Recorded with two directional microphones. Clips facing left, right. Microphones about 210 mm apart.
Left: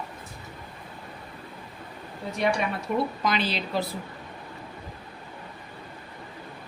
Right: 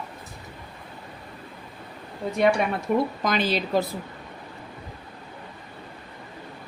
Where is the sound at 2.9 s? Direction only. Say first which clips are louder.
Right 2 dB; 55° right (ahead or behind).